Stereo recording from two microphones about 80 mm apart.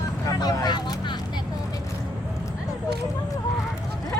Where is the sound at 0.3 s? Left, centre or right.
Left.